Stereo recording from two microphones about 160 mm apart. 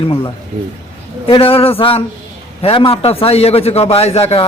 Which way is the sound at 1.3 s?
35° left (ahead or behind).